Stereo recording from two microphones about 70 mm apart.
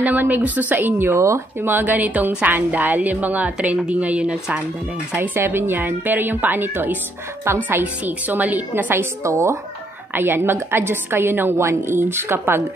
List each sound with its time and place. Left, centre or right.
0.0 s a woman's voice: right
1.2 s speech: right
1.7 s a woman's voice: right
9.2 s speech: right
10.1 s a woman's voice: right